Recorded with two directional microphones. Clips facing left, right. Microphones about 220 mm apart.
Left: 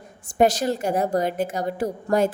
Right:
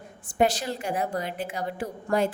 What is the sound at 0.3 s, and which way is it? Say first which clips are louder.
A woman's voice: left 5 dB; 45° left (ahead or behind).